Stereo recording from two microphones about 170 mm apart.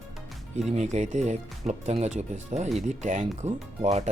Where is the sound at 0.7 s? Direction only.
40° right (ahead or behind).